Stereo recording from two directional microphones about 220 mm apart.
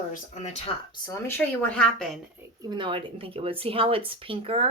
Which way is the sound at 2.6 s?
20° right (ahead or behind).